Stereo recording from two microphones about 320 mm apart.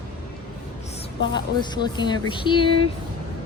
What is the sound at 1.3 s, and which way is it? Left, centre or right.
A woman's voice, centre.